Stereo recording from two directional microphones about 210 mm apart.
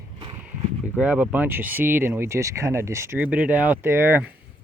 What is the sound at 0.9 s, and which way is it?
Speech, 5° right (ahead or behind).